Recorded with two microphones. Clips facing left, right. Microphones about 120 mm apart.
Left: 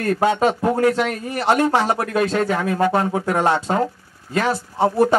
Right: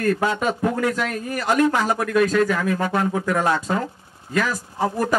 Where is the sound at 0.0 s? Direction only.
30° left (ahead or behind).